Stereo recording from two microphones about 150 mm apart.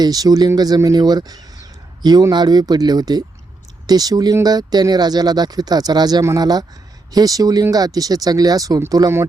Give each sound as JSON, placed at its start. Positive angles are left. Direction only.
{"t": 0.0, "sound": "speech", "side_deg": -25}